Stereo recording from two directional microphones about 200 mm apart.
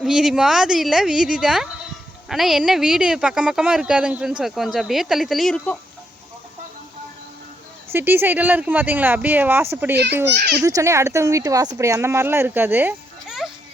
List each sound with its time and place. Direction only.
0.0 s speech: centre (ahead or behind)
7.9 s speech: 10° right (ahead or behind)
10.2 s a child's voice: 55° right (ahead or behind)
10.6 s speech: 15° right (ahead or behind)